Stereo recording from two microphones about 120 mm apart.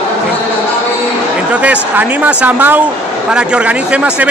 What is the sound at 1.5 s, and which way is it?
Speech, 10° right (ahead or behind).